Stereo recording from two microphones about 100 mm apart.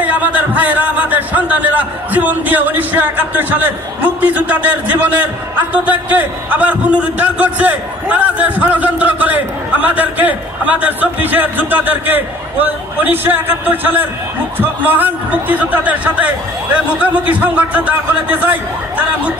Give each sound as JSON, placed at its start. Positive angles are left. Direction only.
{"t": 0.0, "sound": "a man's voice", "side_deg": -15}